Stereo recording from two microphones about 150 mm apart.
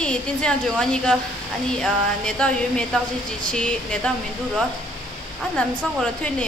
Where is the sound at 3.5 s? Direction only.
5° left (ahead or behind).